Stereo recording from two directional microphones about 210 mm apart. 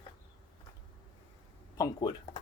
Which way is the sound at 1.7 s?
15° left (ahead or behind).